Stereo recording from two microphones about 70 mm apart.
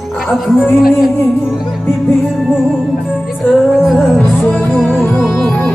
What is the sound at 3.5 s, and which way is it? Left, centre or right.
Music, centre.